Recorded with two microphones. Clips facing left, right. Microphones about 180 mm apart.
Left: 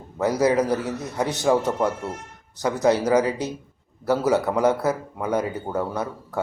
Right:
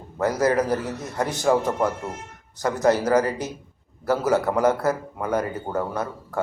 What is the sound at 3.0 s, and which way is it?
Speech, centre (ahead or behind).